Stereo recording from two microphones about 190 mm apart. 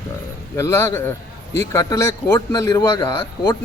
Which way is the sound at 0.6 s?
15° left (ahead or behind).